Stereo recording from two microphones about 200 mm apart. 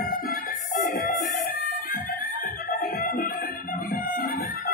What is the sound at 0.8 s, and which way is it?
Music, 45° left (ahead or behind).